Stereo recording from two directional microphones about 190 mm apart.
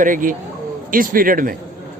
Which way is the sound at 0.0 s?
45° right (ahead or behind).